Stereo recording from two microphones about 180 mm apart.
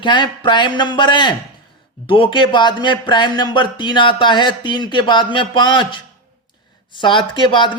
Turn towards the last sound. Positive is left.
turn(degrees=25)  # may be behind; listen again after turning